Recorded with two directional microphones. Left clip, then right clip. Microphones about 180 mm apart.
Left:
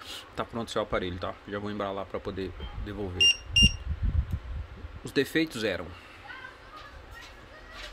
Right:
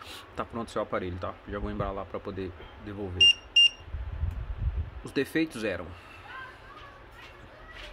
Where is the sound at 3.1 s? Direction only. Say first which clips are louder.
Right 2 dB; 30° right (ahead or behind).